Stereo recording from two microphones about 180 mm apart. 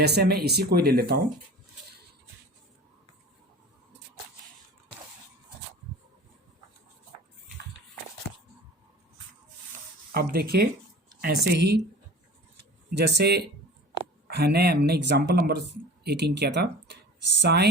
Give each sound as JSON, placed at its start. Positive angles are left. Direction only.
{"t": 0.0, "sound": "speech", "side_deg": -60}
{"t": 10.1, "sound": "speech", "side_deg": -55}
{"t": 12.9, "sound": "speech", "side_deg": -70}